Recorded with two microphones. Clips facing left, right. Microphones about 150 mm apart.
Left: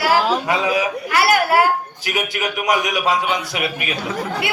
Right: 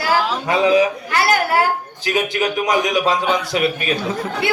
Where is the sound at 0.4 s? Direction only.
25° right (ahead or behind).